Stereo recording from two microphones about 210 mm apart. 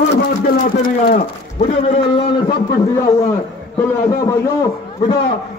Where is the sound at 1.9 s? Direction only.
25° left (ahead or behind).